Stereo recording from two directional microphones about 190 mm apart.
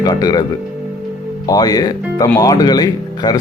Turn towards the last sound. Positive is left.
turn(degrees=20)  # may be behind; listen again after turning